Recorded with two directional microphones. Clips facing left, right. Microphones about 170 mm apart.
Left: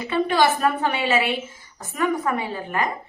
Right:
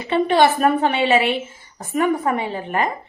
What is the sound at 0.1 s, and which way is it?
A woman's voice, 25° right (ahead or behind).